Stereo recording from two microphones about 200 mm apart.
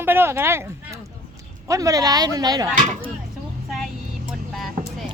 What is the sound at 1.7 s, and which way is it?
Speech, 15° right (ahead or behind).